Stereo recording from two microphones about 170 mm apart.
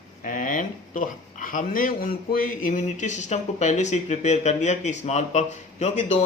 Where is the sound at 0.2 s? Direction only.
50° left (ahead or behind).